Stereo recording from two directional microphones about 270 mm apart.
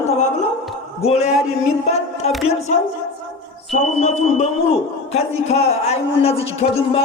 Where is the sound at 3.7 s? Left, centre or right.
Left.